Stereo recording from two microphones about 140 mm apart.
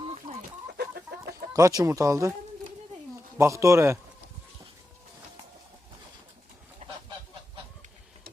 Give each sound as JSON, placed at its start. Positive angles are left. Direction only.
{"t": 0.0, "sound": "chicken", "side_deg": -45}
{"t": 0.9, "sound": "chicken", "side_deg": -90}
{"t": 1.5, "sound": "speech", "side_deg": -25}
{"t": 3.3, "sound": "speech", "side_deg": -20}
{"t": 6.8, "sound": "goose", "side_deg": -60}